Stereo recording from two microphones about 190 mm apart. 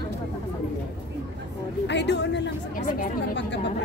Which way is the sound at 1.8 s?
65° left (ahead or behind).